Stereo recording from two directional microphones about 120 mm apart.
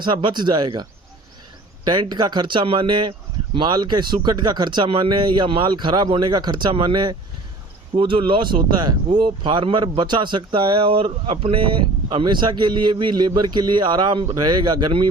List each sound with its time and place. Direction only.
0.0 s speech: 40° right (ahead or behind)